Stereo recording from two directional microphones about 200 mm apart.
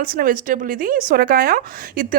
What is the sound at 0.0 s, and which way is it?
A woman's voice, 45° right (ahead or behind).